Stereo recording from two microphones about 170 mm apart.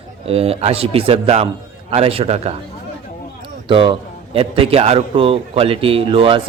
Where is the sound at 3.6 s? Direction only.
30° right (ahead or behind).